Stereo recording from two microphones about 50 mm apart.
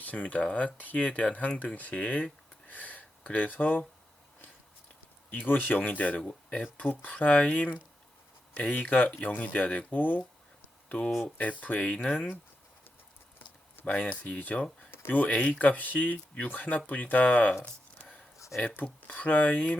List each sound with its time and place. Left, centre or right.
0.0 s speech: left
5.3 s speech: left
13.8 s speech: left
14.8 s speech: left
17.9 s a sound: left
18.9 s speech: left
19.2 s speech: left